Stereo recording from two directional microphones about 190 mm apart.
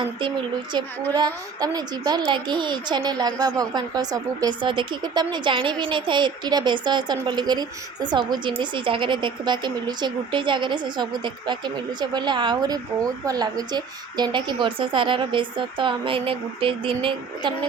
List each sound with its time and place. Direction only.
0.0 s speech: 25° right (ahead or behind)